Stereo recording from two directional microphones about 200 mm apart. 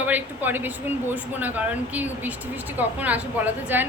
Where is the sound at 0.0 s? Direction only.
10° right (ahead or behind).